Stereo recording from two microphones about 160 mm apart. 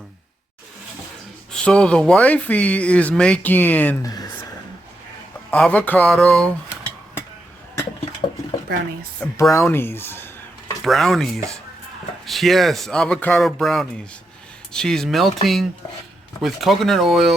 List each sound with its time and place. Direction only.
1.5 s speech: 5° left (ahead or behind)
4.0 s speech: 25° left (ahead or behind)
5.5 s speech: 10° left (ahead or behind)
8.2 s stir: 30° left (ahead or behind)
9.2 s speech: 15° left (ahead or behind)
10.8 s speech: centre (ahead or behind)